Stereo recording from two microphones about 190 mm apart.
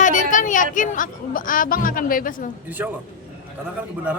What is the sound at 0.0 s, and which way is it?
A woman's voice, 40° left (ahead or behind).